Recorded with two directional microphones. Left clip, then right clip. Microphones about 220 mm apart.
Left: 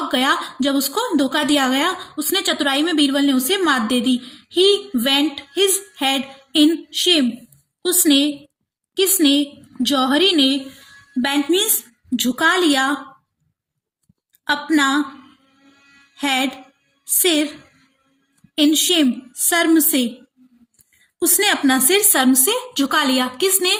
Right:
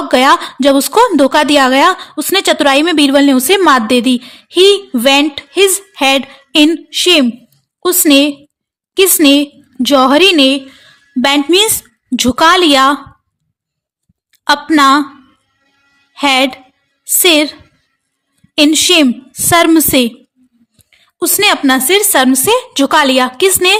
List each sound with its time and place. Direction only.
0.1 s a woman's voice: 50° right (ahead or behind)
14.4 s a woman's voice: 45° right (ahead or behind)
16.1 s a woman's voice: 40° right (ahead or behind)
18.5 s a woman's voice: 40° right (ahead or behind)
21.2 s a woman's voice: 40° right (ahead or behind)